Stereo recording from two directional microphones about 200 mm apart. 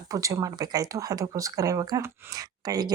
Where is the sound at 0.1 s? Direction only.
15° right (ahead or behind).